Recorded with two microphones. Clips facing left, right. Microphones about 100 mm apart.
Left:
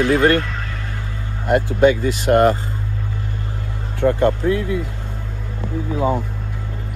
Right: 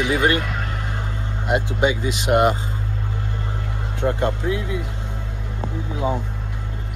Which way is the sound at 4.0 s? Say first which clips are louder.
Left 6 dB; 20° right (ahead or behind).